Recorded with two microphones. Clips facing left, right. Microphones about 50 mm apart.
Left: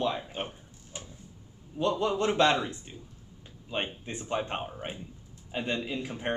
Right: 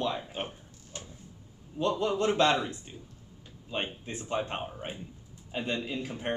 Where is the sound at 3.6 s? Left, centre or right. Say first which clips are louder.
Left 1 dB; centre.